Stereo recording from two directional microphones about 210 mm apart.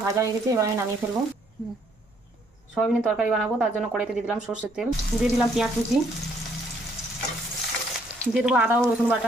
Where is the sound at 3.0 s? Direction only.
Centre (ahead or behind).